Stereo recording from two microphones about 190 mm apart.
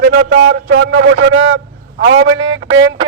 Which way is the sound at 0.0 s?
55° right (ahead or behind).